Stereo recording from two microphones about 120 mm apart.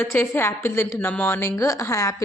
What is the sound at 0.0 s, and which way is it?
Speech, 20° left (ahead or behind).